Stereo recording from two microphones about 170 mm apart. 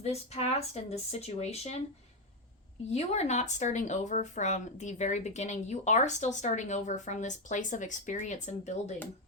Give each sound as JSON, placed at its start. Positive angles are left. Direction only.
{"t": 0.0, "sound": "speech", "side_deg": 40}
{"t": 2.9, "sound": "speech", "side_deg": 40}